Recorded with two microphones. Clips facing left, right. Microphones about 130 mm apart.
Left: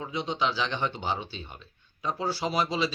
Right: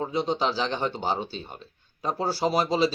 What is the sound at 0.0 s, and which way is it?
Speech, 40° right (ahead or behind).